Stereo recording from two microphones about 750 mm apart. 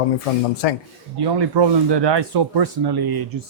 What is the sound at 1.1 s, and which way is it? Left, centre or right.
Speech, right.